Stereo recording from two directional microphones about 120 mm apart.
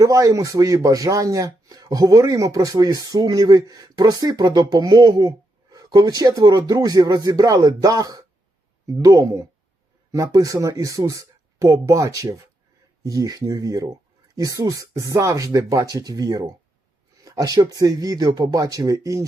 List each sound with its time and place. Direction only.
0.0 s speech: 30° right (ahead or behind)